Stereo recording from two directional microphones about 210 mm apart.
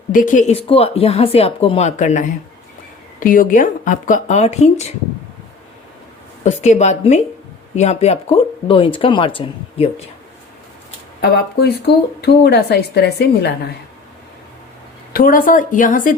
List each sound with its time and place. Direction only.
0.1 s speech: 40° left (ahead or behind)
6.4 s speech: 35° left (ahead or behind)
11.2 s a woman's voice: 50° left (ahead or behind)
15.1 s speech: 40° left (ahead or behind)